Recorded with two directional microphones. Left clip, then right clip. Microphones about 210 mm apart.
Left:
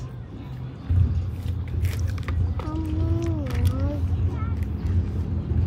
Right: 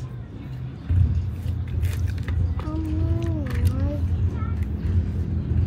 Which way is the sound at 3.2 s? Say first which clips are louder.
Left 1 dB; centre (ahead or behind).